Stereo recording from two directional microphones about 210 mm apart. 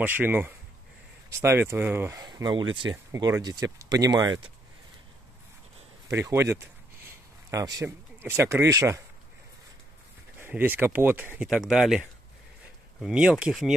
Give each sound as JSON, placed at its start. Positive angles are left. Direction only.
{"t": 0.0, "sound": "speech", "side_deg": -10}
{"t": 6.0, "sound": "speech", "side_deg": -15}
{"t": 10.4, "sound": "speech", "side_deg": -10}